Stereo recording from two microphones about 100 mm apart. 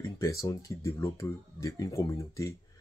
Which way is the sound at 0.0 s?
30° left (ahead or behind).